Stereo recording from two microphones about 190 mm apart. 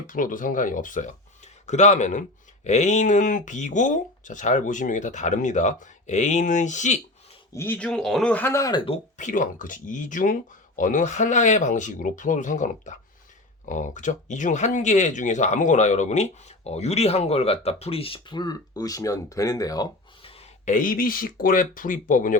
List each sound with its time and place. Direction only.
0.1 s speech: 45° left (ahead or behind)
7.5 s speech: 10° left (ahead or behind)
9.1 s speech: 40° left (ahead or behind); by 20.4 s 25° left (ahead or behind)
20.7 s speech: 45° left (ahead or behind)